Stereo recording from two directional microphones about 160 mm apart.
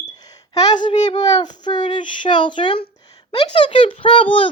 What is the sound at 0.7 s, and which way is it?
A child's voice, 30° left (ahead or behind).